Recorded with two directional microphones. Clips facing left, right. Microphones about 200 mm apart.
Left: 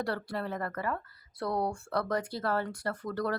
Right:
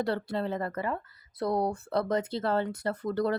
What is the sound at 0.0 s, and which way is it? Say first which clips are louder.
Speech: right 4 dB; 25° right (ahead or behind).